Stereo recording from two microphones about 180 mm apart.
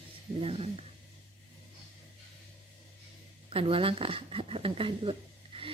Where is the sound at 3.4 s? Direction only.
30° right (ahead or behind).